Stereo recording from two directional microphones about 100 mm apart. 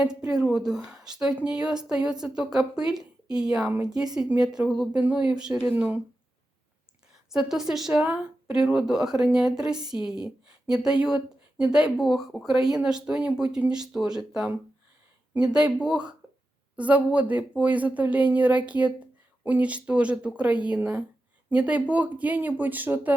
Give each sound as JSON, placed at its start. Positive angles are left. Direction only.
{"t": 0.0, "sound": "a woman's voice", "side_deg": -10}
{"t": 7.3, "sound": "speech", "side_deg": -5}